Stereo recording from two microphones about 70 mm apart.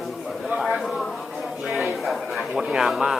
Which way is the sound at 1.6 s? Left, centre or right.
Centre.